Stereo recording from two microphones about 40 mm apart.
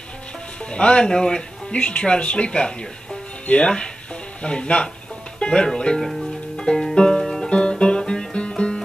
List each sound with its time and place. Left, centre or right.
0.7 s speech: left
5.4 s music: left
5.9 s speech: centre
6.5 s music: centre
7.4 s music: left